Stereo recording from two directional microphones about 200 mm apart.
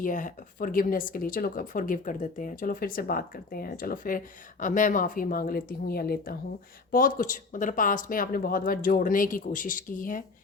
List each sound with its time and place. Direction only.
0.0 s speech: 40° left (ahead or behind)